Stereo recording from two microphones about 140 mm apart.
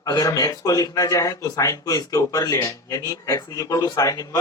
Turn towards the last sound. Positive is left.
turn(degrees=25)  # may be behind; listen again after turning